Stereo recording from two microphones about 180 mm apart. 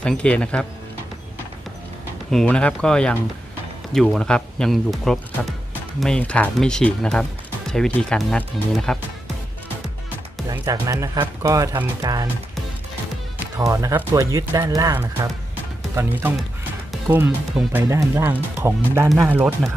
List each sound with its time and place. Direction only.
0.0 s speech: 5° left (ahead or behind)
2.3 s speech: 5° left (ahead or behind)
10.5 s speech: 20° right (ahead or behind)
13.6 s speech: 20° right (ahead or behind)
19.0 s speech: centre (ahead or behind)